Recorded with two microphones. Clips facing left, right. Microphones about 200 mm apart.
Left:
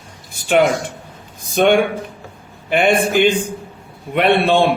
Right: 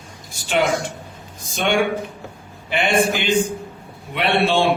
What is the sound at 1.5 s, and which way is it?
A man's voice, 55° left (ahead or behind).